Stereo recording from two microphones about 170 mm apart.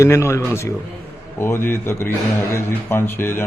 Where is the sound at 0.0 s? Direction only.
15° left (ahead or behind).